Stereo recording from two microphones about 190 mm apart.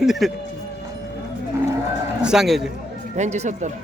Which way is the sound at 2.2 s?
5° right (ahead or behind).